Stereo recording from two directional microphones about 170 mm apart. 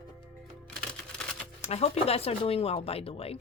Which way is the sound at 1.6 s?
40° left (ahead or behind).